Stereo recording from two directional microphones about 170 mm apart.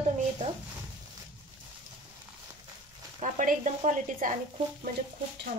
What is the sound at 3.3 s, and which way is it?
Speech, 45° right (ahead or behind).